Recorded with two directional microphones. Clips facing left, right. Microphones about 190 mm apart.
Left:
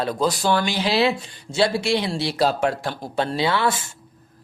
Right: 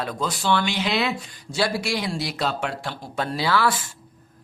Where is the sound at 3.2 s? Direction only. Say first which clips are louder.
Left 1 dB; 25° left (ahead or behind).